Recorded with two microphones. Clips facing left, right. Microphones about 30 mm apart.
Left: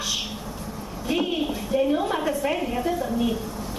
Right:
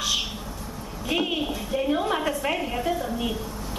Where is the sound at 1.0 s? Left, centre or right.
Centre.